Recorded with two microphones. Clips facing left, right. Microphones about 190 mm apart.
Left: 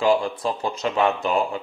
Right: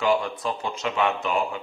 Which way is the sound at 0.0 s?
30° left (ahead or behind).